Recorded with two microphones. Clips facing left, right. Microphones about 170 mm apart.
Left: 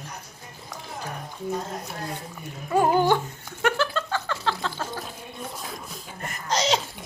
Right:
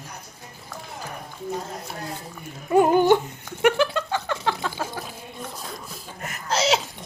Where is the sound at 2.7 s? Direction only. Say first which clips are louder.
Right 4 dB; 20° right (ahead or behind).